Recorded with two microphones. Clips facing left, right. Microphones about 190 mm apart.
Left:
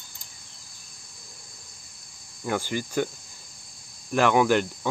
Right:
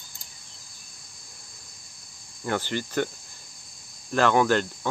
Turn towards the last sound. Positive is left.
turn(degrees=10)  # may be behind; listen again after turning